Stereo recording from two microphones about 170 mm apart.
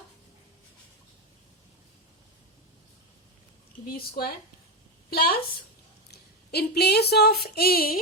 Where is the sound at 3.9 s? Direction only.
65° left (ahead or behind).